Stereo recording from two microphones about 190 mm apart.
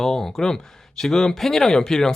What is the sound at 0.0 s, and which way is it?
Speech, centre (ahead or behind).